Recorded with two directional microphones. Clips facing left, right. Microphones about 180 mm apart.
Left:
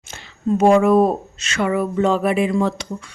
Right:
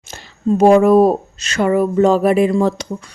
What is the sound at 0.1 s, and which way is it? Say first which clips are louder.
A woman's voice: right 3 dB; 40° right (ahead or behind).